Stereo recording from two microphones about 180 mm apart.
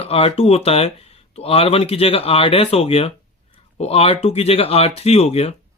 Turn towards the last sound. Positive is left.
turn(degrees=35)  # may be behind; listen again after turning